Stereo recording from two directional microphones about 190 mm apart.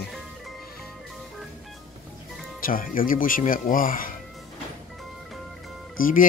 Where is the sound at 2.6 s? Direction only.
45° left (ahead or behind).